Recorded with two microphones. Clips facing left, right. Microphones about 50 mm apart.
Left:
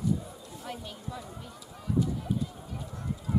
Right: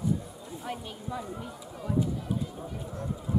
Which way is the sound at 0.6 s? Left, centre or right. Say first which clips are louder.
Right 3 dB; centre.